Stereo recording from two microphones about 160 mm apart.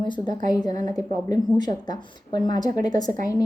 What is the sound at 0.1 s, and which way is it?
A woman's voice, 25° left (ahead or behind).